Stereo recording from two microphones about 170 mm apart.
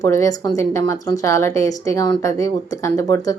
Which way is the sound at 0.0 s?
20° left (ahead or behind).